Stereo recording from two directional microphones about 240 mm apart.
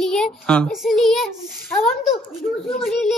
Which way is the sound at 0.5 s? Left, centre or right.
Centre.